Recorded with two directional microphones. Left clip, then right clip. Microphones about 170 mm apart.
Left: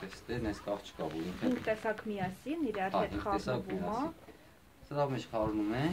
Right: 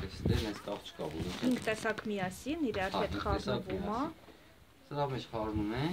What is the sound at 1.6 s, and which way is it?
Speech, 65° right (ahead or behind).